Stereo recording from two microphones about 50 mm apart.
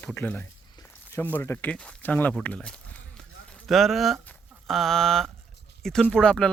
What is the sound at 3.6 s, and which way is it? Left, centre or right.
Speech, centre.